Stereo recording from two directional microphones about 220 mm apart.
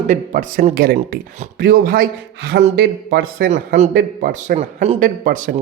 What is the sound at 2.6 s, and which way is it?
Speech, 30° right (ahead or behind).